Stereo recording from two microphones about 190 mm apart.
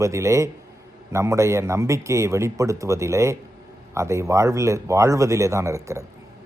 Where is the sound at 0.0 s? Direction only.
15° right (ahead or behind).